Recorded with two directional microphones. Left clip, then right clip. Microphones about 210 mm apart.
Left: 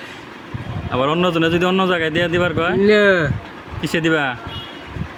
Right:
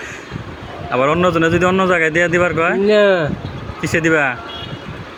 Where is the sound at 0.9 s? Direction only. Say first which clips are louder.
Right 3 dB; 10° left (ahead or behind).